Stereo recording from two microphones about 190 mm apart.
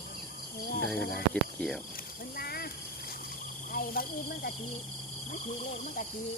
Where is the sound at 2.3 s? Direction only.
55° left (ahead or behind).